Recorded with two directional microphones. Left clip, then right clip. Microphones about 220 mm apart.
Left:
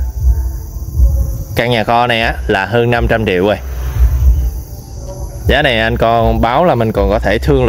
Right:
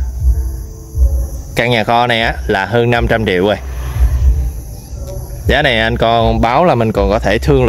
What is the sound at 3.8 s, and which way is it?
Vehicle, 50° right (ahead or behind).